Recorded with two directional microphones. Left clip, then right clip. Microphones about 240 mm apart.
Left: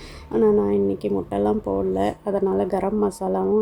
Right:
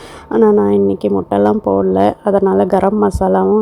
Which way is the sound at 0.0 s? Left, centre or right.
Right.